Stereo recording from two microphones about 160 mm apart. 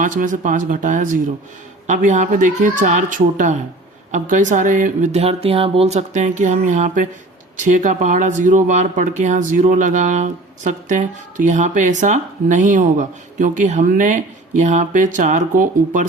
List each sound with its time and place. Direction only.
0.0 s speech: 55° right (ahead or behind)